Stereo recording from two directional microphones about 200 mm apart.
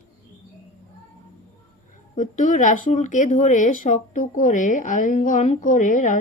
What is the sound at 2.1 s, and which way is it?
Speech, 40° left (ahead or behind).